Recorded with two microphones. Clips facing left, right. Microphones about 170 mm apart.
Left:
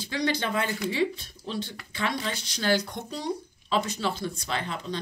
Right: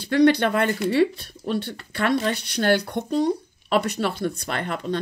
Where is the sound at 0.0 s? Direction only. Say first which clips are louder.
Right 11 dB; 60° right (ahead or behind).